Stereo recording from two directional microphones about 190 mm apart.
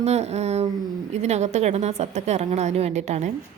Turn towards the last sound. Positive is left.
turn(degrees=-35)  # may be behind; listen again after turning